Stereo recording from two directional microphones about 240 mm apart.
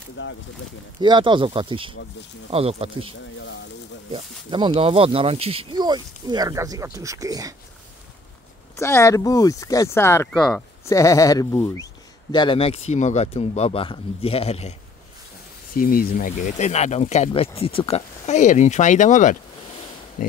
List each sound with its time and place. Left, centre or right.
0.2 s speech: left
1.0 s speech: centre
8.7 s speech: centre
15.7 s speech: left
20.2 s a sound: left